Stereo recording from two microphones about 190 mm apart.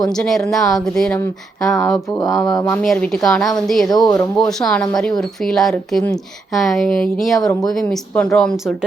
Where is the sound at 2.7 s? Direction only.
5° left (ahead or behind).